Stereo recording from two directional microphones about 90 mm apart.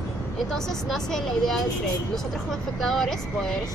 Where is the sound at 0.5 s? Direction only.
5° left (ahead or behind).